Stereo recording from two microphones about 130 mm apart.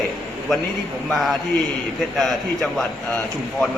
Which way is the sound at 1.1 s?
Centre (ahead or behind).